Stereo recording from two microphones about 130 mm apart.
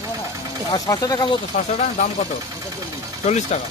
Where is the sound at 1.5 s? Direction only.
90° left.